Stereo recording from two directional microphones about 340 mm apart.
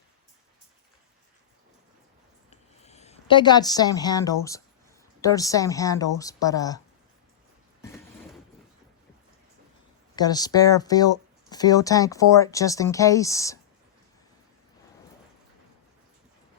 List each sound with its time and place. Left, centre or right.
2.5 s speech: centre
10.2 s speech: centre